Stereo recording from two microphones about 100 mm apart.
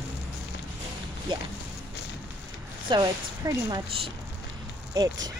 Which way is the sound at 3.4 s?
35° right (ahead or behind).